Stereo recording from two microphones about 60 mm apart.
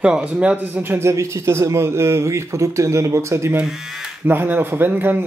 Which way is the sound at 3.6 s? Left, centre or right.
Centre.